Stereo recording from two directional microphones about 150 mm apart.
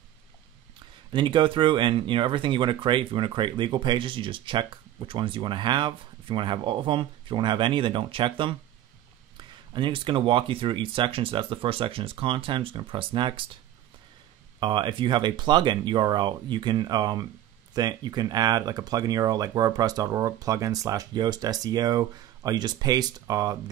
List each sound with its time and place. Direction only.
1.1 s speech: 30° right (ahead or behind)
9.7 s speech: 30° right (ahead or behind)
14.6 s speech: 30° right (ahead or behind)